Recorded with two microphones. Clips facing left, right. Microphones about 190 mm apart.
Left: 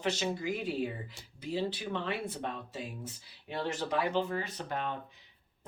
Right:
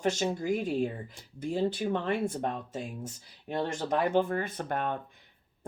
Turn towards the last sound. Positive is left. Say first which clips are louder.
# right 4 dB
turn(degrees=-50)  # may be behind; listen again after turning